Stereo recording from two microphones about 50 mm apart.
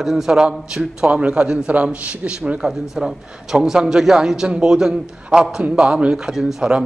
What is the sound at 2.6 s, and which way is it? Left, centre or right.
A man's voice, centre.